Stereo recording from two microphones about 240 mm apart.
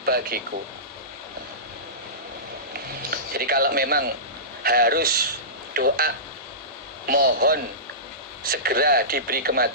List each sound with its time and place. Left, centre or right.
0.0 s speech: right
3.1 s speech: right